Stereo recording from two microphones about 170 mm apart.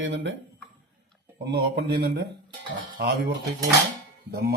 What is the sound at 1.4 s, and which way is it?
Speech, 70° right (ahead or behind).